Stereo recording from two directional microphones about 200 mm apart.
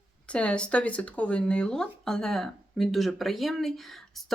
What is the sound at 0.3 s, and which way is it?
Speech, 5° left (ahead or behind).